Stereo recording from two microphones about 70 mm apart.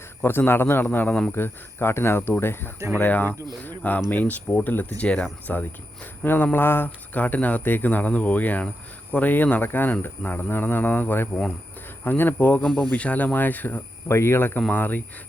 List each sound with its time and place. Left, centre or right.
0.2 s speech: left
1.3 s speech: left
14.1 s speech: left